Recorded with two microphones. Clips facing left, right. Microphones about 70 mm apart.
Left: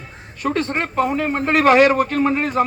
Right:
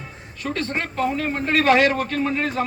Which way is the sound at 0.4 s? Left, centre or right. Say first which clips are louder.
Left 5 dB; left.